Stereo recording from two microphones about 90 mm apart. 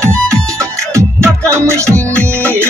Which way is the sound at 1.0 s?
30° right (ahead or behind).